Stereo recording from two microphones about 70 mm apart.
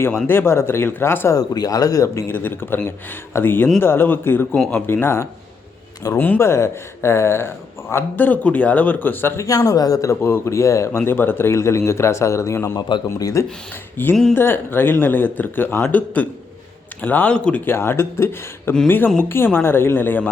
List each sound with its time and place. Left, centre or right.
0.3 s speech: left
1.3 s speech: left
2.2 s speech: left
6.4 s speech: left
9.5 s speech: left
10.2 s speech: left
13.1 s speech: left
13.9 s speech: left
17.3 s speech: centre
17.7 s speech: left